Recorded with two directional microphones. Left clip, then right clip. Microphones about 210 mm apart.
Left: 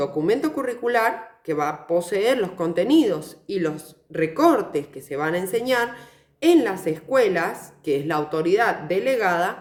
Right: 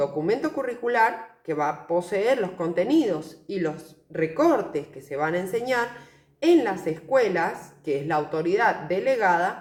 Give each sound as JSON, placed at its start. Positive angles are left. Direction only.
{"t": 0.0, "sound": "speech", "side_deg": 45}